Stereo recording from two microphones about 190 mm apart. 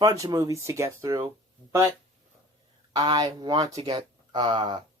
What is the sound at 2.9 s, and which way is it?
Speech, 25° right (ahead or behind).